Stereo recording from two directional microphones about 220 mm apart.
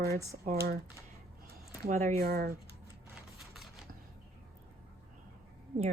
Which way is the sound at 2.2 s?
45° right (ahead or behind).